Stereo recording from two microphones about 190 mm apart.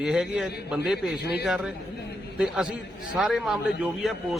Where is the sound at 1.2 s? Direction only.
60° left (ahead or behind).